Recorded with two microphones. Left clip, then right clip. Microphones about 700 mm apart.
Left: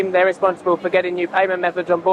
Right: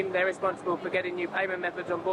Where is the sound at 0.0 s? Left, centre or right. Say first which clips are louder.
Left 11 dB; left.